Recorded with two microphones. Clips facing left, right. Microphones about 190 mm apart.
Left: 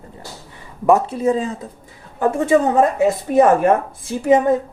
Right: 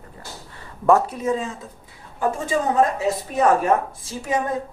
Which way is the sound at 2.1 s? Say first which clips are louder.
Left 8 dB; 60° left (ahead or behind).